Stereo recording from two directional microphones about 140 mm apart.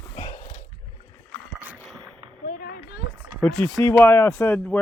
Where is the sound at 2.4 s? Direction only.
90° left.